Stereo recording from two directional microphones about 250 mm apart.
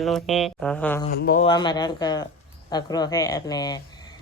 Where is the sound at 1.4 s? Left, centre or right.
Centre.